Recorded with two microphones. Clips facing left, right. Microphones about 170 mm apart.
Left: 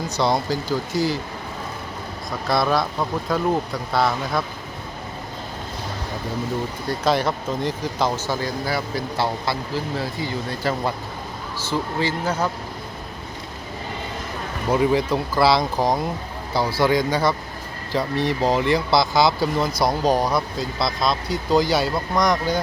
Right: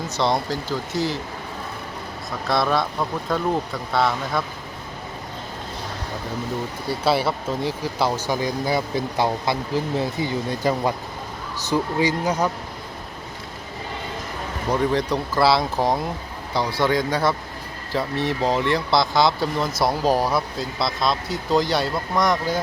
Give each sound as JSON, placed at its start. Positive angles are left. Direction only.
{"t": 0.1, "sound": "speech", "side_deg": 0}
{"t": 2.5, "sound": "speech", "side_deg": 0}
{"t": 6.8, "sound": "speech", "side_deg": -10}
{"t": 14.7, "sound": "speech", "side_deg": 5}